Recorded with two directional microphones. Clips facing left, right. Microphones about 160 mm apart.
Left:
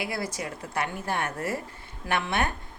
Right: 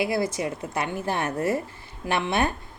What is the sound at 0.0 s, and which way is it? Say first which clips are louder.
Speech: right 7 dB; 25° right (ahead or behind).